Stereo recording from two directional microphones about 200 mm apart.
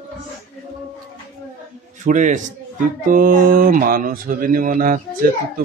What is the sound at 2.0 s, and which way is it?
Speech, 40° right (ahead or behind).